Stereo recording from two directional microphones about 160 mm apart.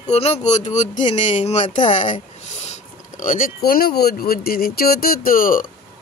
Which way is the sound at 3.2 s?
60° left (ahead or behind).